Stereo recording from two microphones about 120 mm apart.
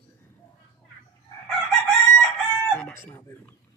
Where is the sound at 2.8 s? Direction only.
15° left (ahead or behind).